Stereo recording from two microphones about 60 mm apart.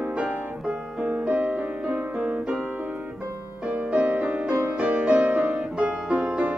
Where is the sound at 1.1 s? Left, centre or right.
Right.